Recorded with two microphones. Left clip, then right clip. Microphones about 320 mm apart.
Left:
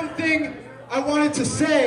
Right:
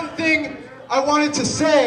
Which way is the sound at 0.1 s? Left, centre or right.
Centre.